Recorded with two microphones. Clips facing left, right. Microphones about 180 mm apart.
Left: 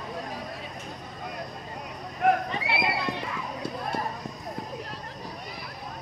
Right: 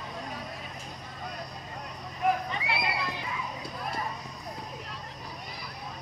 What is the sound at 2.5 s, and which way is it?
Horse, centre (ahead or behind).